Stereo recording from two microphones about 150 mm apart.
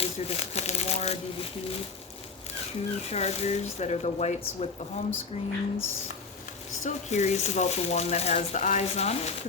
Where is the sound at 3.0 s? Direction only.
45° left (ahead or behind).